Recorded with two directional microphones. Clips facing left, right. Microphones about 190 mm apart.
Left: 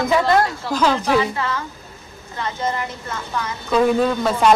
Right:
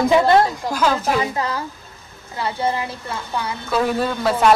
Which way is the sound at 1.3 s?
35° right (ahead or behind).